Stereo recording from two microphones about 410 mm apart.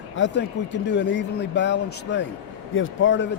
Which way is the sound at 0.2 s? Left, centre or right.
Left.